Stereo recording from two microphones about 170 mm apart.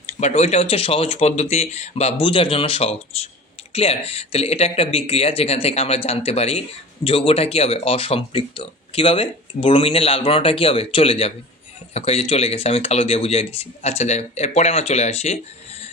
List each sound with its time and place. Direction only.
0.0 s speech: 40° left (ahead or behind)